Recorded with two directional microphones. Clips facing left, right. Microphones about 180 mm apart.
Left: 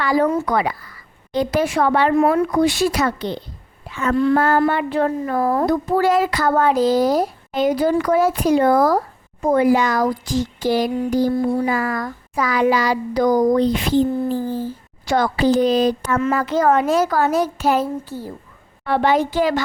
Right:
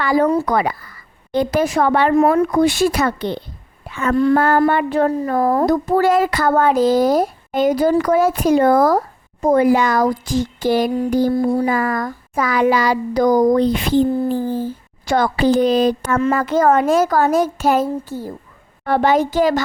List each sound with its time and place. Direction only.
0.0 s speech: 50° right (ahead or behind)
0.3 s a child's voice: 40° right (ahead or behind); by 11.3 s 55° right (ahead or behind)
11.3 s a child's voice: 40° right (ahead or behind)